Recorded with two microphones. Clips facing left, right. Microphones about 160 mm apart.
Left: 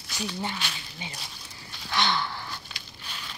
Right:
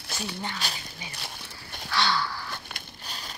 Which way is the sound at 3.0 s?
40° right (ahead or behind).